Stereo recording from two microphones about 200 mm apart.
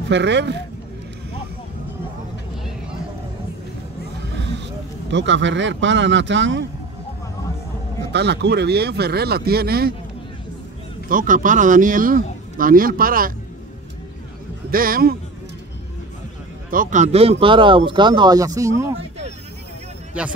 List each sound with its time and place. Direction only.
0.1 s speech: 60° right (ahead or behind)
5.1 s speech: 65° right (ahead or behind)
8.1 s speech: 55° right (ahead or behind)
11.1 s speech: 40° right (ahead or behind)
14.7 s speech: 45° right (ahead or behind)
16.7 s speech: 40° right (ahead or behind); by 18.9 s 15° right (ahead or behind)